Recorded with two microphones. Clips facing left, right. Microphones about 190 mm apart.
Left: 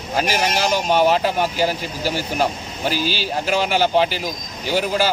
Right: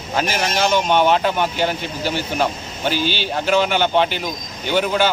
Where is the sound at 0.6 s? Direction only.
35° left (ahead or behind).